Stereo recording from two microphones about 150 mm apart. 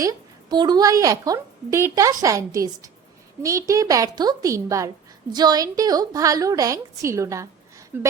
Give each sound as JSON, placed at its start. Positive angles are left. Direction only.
{"t": 0.0, "sound": "a woman's voice", "side_deg": -25}